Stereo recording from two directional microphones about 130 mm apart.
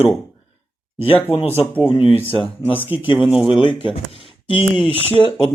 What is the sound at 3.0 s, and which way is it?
Speech, 40° left (ahead or behind).